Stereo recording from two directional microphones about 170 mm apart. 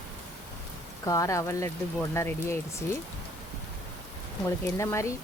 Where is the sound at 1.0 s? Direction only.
20° left (ahead or behind).